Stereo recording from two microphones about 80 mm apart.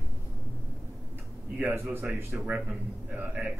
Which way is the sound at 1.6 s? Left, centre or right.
Right.